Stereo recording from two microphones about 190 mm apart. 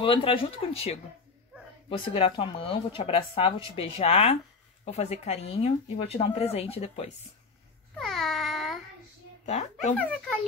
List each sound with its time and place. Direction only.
0.0 s speech: 30° left (ahead or behind)
8.0 s a sound: centre (ahead or behind)
9.5 s speech: 35° left (ahead or behind)
9.9 s a child's voice: 5° left (ahead or behind)